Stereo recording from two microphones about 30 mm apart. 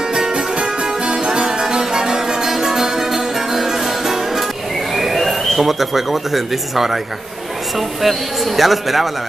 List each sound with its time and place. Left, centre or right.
0.1 s music: right; by 4.5 s centre
4.9 s speech: centre
8.0 s speech: centre